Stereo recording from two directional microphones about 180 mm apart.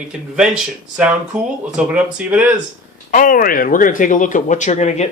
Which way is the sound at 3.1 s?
50° left (ahead or behind).